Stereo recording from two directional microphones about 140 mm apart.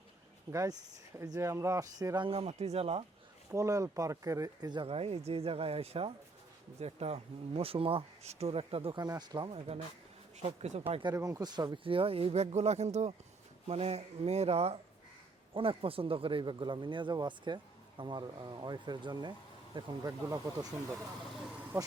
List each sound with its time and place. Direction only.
0.5 s speech: 25° right (ahead or behind)
2.2 s speech: 45° right (ahead or behind)
3.5 s speech: 25° right (ahead or behind)
9.5 s speech: 45° right (ahead or behind)
11.1 s speech: 25° right (ahead or behind)
20.1 s speech: 25° right (ahead or behind)